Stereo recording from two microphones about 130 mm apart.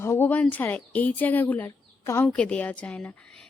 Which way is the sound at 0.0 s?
20° left (ahead or behind).